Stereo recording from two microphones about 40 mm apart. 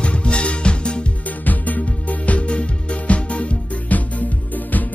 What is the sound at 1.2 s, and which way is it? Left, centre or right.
Music, left.